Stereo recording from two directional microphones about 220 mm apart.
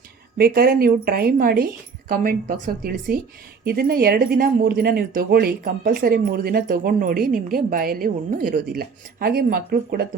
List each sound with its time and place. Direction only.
0.3 s a woman's voice: 45° right (ahead or behind)